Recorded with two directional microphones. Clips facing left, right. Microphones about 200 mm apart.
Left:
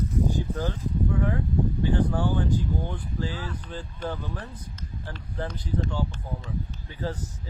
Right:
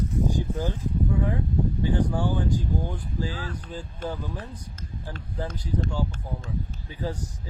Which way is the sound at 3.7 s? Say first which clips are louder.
Even; 10° right (ahead or behind).